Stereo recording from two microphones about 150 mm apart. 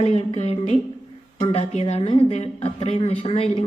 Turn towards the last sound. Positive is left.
turn(degrees=45)  # may be behind; listen again after turning